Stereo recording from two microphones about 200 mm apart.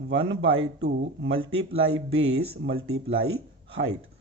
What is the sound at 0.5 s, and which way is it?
Speech, 80° right.